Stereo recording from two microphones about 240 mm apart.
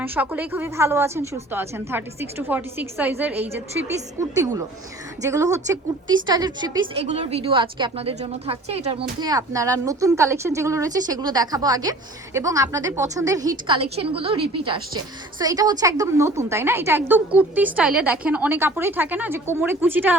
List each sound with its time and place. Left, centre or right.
0.0 s a woman's voice: centre
5.2 s a woman's voice: centre